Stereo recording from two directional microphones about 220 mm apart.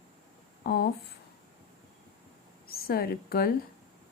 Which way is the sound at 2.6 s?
45° left (ahead or behind).